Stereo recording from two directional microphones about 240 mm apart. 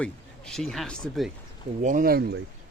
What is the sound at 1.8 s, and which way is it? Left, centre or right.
Speech, right.